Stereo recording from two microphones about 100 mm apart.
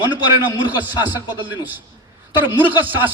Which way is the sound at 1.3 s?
20° right (ahead or behind).